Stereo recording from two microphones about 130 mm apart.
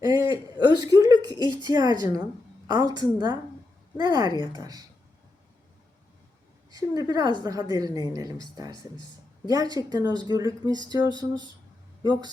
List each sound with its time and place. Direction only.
0.0 s a sound: 30° right (ahead or behind)
0.6 s a woman's voice: 30° right (ahead or behind)
6.7 s a woman's voice: 30° right (ahead or behind)